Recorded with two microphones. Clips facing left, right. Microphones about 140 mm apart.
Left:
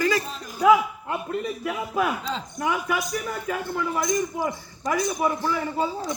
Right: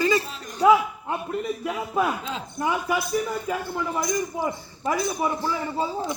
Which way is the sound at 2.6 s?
30° right (ahead or behind).